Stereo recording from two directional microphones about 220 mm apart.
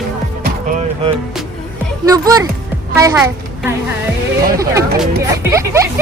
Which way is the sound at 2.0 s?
15° right (ahead or behind).